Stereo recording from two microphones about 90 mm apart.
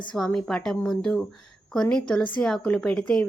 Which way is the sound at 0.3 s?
5° left (ahead or behind).